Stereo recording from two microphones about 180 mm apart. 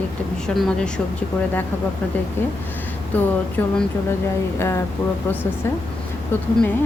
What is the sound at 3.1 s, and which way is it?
Speech, 10° left (ahead or behind).